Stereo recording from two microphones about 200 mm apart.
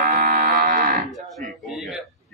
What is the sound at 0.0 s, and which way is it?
Moo, 45° right (ahead or behind).